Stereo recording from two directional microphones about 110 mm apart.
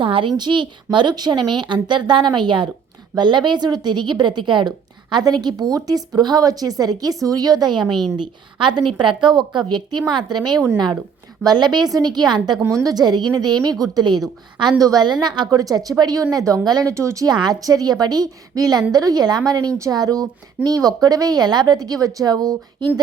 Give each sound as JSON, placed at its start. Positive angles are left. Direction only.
{"t": 0.0, "sound": "a woman's voice", "side_deg": -50}
{"t": 11.4, "sound": "speech", "side_deg": -40}